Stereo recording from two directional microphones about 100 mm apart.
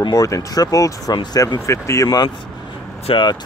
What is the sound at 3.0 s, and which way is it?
Speech, 55° left (ahead or behind).